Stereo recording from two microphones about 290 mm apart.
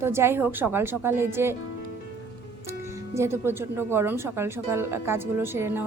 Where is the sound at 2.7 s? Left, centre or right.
Centre.